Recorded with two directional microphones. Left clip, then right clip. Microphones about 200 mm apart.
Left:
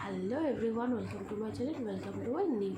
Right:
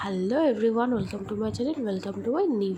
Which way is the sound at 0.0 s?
45° right (ahead or behind).